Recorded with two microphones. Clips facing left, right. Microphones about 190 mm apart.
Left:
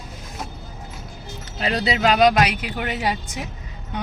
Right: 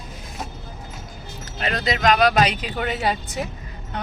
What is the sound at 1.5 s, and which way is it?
Speech, 35° left (ahead or behind).